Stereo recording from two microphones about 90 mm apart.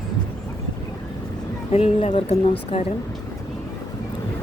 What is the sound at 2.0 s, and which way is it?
Speech, 90° left.